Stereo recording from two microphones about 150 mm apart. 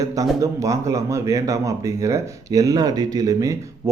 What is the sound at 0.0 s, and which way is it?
Speech, 20° right (ahead or behind).